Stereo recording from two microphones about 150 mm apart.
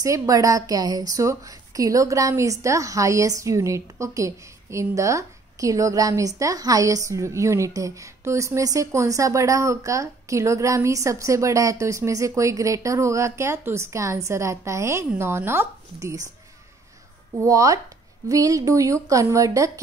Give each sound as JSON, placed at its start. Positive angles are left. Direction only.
{"t": 0.0, "sound": "a woman's voice", "side_deg": -20}
{"t": 17.4, "sound": "a woman's voice", "side_deg": -20}